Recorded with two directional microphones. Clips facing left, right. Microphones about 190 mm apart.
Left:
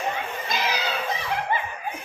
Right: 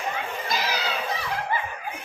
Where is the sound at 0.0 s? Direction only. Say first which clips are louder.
Left 1 dB; 20° left (ahead or behind).